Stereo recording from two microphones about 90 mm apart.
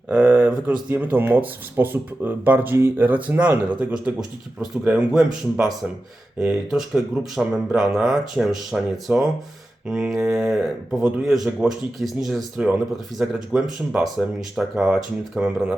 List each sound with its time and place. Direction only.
0.1 s speech: 15° right (ahead or behind)
5.1 s speech: 5° right (ahead or behind)
9.8 s mantra: 10° right (ahead or behind)
10.1 s speech: 5° right (ahead or behind)